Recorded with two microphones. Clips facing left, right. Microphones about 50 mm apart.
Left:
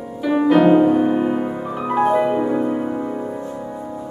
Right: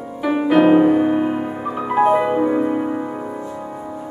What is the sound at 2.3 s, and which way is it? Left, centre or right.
Music, centre.